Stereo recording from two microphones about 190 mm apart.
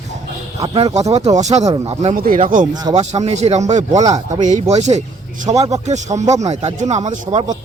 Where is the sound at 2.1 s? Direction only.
50° right (ahead or behind).